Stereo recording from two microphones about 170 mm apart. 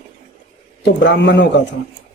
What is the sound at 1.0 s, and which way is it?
Speech, 90° left.